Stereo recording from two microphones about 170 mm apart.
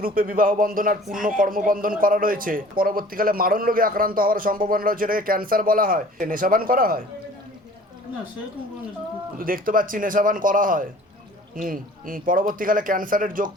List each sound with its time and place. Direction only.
0.0 s a man's voice: 60° right (ahead or behind)
9.4 s speech: 55° right (ahead or behind)